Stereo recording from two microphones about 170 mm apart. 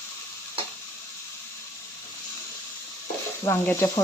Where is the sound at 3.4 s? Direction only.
15° left (ahead or behind).